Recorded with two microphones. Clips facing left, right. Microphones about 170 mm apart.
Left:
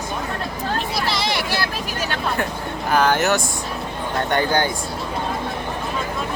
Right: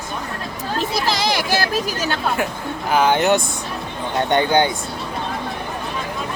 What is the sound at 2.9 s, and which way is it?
Speech, 15° right (ahead or behind).